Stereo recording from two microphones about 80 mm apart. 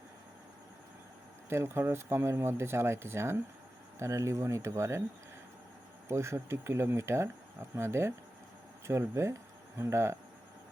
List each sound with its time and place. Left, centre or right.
1.5 s speech: right
6.1 s speech: right